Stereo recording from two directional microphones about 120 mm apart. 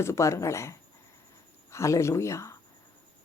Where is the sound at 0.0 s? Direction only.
25° left (ahead or behind).